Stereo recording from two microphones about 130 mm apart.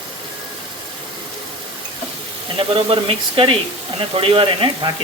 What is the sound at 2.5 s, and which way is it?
Speech, 45° right (ahead or behind).